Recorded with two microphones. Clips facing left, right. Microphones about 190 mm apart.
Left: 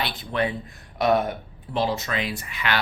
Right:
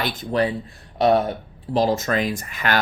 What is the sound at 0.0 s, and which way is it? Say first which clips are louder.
Speech: right 4 dB; 45° right (ahead or behind).